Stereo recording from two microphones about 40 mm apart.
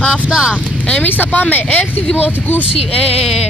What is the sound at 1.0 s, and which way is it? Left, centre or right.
Speech, left.